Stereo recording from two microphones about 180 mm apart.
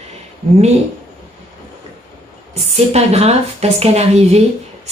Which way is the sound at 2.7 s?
35° right (ahead or behind).